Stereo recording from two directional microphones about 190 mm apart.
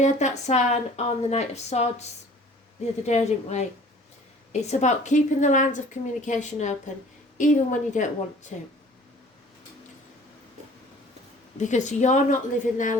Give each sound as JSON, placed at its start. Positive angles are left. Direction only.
{"t": 0.0, "sound": "a woman's voice", "side_deg": 40}
{"t": 11.6, "sound": "a woman's voice", "side_deg": 40}